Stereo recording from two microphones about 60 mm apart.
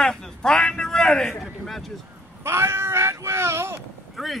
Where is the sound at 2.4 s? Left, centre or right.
Right.